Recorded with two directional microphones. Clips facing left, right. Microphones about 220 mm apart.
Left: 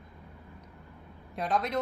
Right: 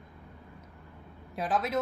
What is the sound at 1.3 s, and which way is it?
Speech, 5° right (ahead or behind).